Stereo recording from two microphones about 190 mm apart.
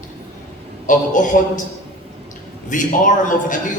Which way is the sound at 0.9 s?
45° left (ahead or behind).